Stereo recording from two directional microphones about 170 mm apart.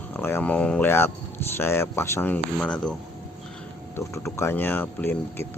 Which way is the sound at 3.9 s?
15° left (ahead or behind).